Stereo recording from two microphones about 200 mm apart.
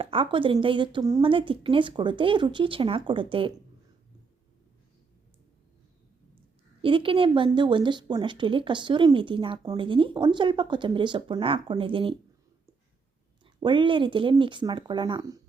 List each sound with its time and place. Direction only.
0.0 s speech: 25° right (ahead or behind)
6.8 s speech: 25° right (ahead or behind)
13.4 s speech: 25° right (ahead or behind)